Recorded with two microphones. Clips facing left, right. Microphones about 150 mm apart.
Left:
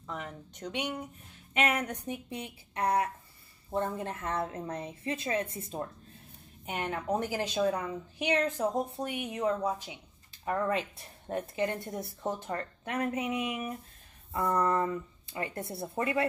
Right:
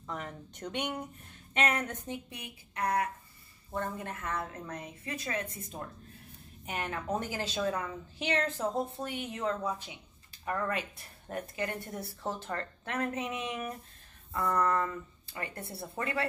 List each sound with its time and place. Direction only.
0.0 s a woman's voice: centre (ahead or behind)
2.0 s a woman's voice: 25° left (ahead or behind)
10.7 s a woman's voice: 25° left (ahead or behind); by 13.7 s 10° left (ahead or behind)
14.3 s a woman's voice: 25° left (ahead or behind)